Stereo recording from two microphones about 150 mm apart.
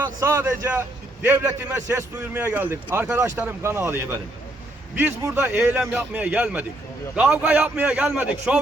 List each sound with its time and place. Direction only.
0.0 s speech: 15° right (ahead or behind)